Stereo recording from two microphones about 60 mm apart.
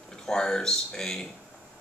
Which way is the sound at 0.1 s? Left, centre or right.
Centre.